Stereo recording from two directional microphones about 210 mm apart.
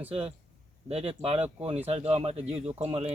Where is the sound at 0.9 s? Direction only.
30° right (ahead or behind).